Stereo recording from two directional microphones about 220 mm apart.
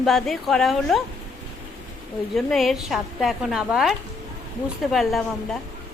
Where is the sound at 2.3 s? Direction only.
Centre (ahead or behind).